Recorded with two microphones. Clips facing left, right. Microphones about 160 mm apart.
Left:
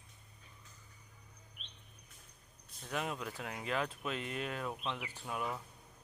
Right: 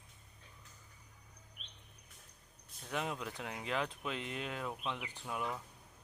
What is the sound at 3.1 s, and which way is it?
Speech, 20° right (ahead or behind).